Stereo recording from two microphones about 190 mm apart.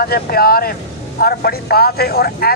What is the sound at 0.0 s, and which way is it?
Speech, 50° left (ahead or behind).